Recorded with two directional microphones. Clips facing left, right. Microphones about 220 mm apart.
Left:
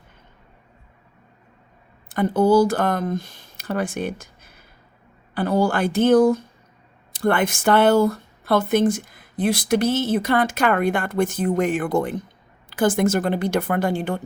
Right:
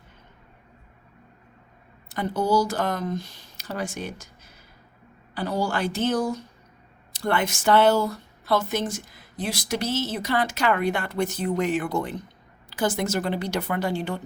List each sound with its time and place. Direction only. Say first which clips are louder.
2.0 s speech: left 7 dB; 50° left (ahead or behind)